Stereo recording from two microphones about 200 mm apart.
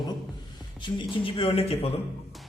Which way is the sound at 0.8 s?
25° left (ahead or behind).